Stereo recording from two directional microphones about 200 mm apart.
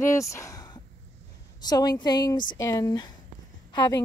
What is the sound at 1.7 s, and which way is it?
A woman's voice, 20° left (ahead or behind).